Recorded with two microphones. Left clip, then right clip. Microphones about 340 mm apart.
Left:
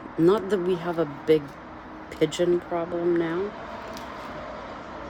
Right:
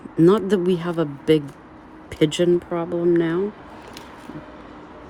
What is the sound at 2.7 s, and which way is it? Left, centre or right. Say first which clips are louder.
Speech: right 5 dB; right.